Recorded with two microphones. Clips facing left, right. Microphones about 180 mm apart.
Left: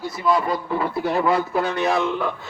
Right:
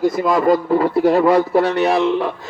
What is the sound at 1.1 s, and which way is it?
A man's voice, 40° right (ahead or behind).